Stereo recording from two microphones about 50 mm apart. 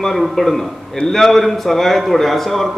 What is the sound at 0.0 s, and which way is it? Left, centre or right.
A man's voice, centre.